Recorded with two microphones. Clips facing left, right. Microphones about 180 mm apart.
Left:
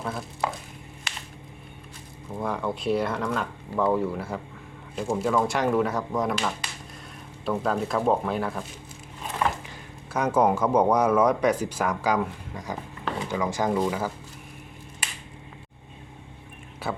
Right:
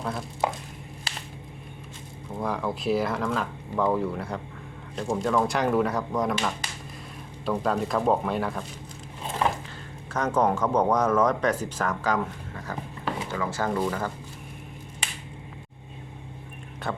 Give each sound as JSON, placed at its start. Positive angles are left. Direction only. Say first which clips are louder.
{"t": 0.0, "sound": "speech", "louder": "right 1 dB", "side_deg": 0}
{"t": 1.1, "sound": "a sound", "louder": "right 1 dB", "side_deg": -35}
{"t": 2.4, "sound": "speech", "louder": "even", "side_deg": 0}
{"t": 10.1, "sound": "speech", "louder": "left 2 dB", "side_deg": 10}
{"t": 16.8, "sound": "music", "louder": "left 1 dB", "side_deg": 5}